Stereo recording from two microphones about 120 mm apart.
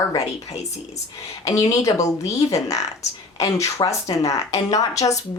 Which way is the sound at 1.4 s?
30° left (ahead or behind).